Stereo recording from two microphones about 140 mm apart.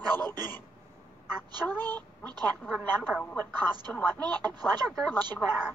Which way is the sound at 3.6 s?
30° right (ahead or behind).